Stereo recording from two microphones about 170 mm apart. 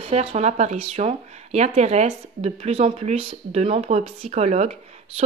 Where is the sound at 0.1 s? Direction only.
40° right (ahead or behind).